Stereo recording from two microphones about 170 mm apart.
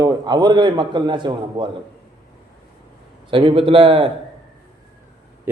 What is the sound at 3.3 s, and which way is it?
Speech, 30° right (ahead or behind).